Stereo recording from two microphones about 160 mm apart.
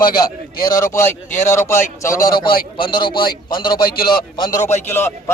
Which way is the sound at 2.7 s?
30° left (ahead or behind).